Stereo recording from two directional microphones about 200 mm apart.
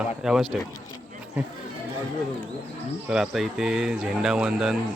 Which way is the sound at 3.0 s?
Centre (ahead or behind).